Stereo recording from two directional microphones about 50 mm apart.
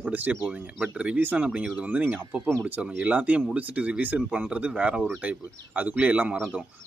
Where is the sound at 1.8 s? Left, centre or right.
Right.